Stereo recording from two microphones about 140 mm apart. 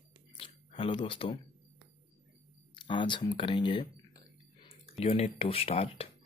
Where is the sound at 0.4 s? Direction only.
40° left (ahead or behind).